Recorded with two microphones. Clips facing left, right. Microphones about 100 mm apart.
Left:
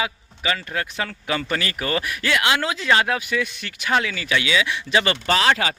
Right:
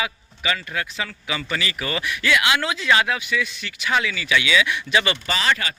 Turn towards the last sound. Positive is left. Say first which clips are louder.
# left 4 dB
turn(degrees=75)  # may be behind; listen again after turning